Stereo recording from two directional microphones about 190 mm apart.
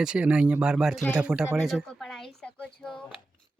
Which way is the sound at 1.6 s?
Centre (ahead or behind).